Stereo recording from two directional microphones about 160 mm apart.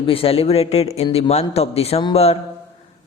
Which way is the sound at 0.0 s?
35° left (ahead or behind).